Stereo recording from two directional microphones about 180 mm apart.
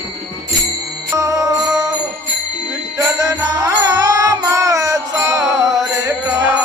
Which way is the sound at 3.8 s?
20° right (ahead or behind).